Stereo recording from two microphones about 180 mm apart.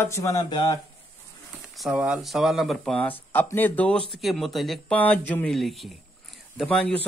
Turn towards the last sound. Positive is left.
turn(degrees=5)  # may be behind; listen again after turning